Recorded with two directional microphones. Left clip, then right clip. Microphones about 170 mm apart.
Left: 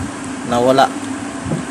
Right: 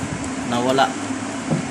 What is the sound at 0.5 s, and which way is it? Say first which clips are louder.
Speech: left 6 dB; 40° left (ahead or behind).